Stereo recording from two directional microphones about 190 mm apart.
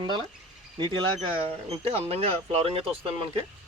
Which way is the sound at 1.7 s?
30° right (ahead or behind).